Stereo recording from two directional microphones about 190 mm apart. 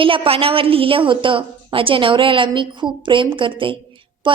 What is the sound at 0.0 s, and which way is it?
A woman's voice, 30° right (ahead or behind).